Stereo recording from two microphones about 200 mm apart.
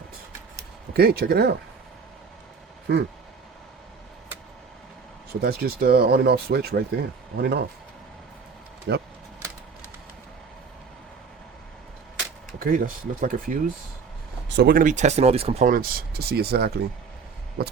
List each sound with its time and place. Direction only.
0.9 s speech: 50° right (ahead or behind)
5.3 s speech: 55° right (ahead or behind)
8.9 s speech: 55° right (ahead or behind)
12.5 s speech: 45° right (ahead or behind)